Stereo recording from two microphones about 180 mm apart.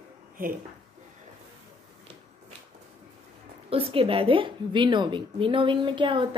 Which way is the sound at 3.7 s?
30° right (ahead or behind).